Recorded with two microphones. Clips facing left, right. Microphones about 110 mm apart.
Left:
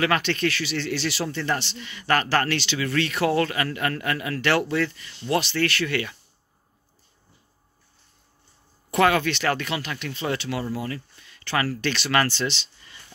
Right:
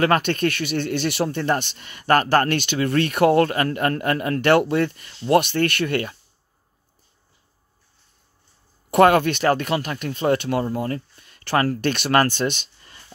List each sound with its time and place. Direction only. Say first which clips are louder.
0.0 s speech: right 4 dB; 45° right (ahead or behind)
8.9 s speech: right 5 dB; 50° right (ahead or behind)